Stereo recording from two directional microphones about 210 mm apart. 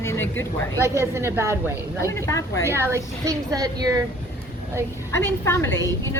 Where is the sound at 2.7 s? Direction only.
10° right (ahead or behind).